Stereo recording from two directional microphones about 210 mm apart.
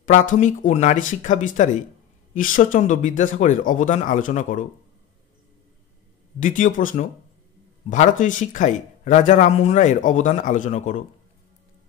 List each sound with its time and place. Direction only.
0.0 s a man's voice: 35° left (ahead or behind)
6.4 s a man's voice: 40° left (ahead or behind)